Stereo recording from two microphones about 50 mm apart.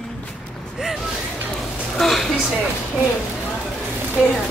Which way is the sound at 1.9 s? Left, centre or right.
Centre.